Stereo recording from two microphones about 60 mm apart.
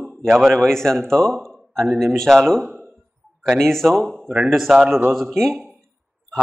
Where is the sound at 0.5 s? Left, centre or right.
Centre.